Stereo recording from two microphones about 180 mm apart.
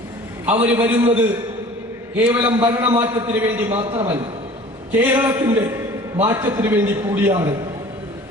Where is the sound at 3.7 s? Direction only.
35° right (ahead or behind).